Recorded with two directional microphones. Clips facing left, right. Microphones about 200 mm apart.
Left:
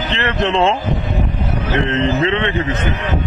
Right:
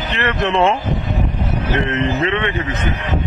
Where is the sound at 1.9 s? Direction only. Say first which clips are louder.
Left 2 dB; 25° left (ahead or behind).